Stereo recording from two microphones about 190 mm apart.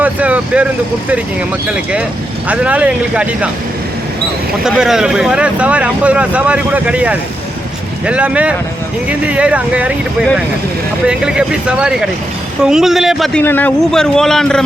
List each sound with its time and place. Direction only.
0.0 s speech: 10° right (ahead or behind)
1.7 s speech: 5° right (ahead or behind)
4.6 s speech: 5° right (ahead or behind)